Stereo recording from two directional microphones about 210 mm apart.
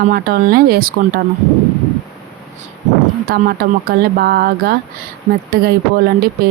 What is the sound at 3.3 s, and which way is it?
Speech, 45° right (ahead or behind).